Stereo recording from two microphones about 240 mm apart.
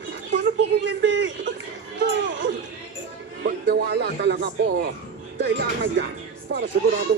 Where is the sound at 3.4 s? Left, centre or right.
Right.